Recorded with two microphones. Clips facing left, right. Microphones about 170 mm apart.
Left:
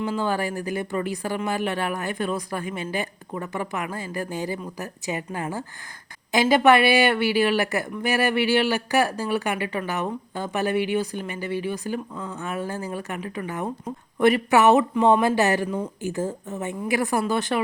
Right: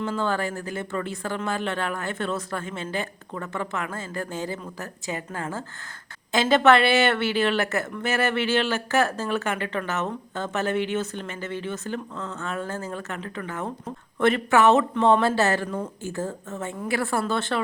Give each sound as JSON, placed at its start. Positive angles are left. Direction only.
{"t": 0.0, "sound": "speech", "side_deg": 15}